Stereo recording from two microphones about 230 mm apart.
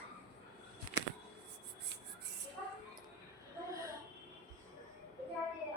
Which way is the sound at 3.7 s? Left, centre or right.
Centre.